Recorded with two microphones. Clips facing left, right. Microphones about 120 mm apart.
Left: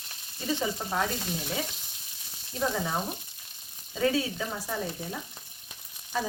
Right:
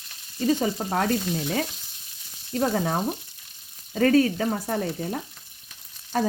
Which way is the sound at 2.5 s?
55° right (ahead or behind).